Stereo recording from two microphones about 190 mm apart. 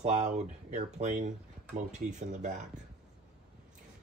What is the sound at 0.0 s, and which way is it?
Speech, 35° right (ahead or behind).